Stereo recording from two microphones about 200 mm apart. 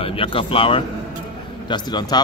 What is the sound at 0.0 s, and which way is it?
Speech, 25° left (ahead or behind).